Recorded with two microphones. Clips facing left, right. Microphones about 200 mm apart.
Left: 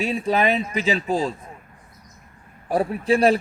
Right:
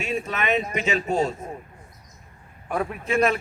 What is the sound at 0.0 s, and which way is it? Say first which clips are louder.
A man's voice: left 6 dB; 35° left (ahead or behind).